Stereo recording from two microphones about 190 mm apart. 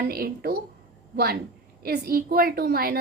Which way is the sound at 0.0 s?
50° right (ahead or behind).